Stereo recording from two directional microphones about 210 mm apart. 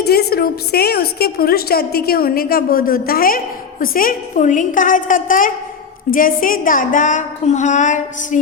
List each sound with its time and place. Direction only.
0.0 s a woman's voice: 50° left (ahead or behind)